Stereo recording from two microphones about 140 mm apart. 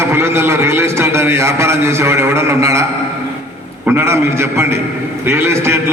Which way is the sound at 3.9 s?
20° right (ahead or behind).